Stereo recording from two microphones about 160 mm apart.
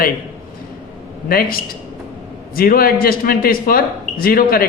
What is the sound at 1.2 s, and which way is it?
A man's voice, 65° left (ahead or behind).